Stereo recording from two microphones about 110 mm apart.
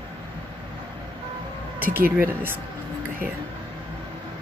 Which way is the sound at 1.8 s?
20° right (ahead or behind).